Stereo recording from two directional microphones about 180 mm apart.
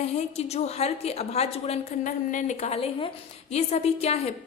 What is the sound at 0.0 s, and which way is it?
A woman's voice, 35° left (ahead or behind).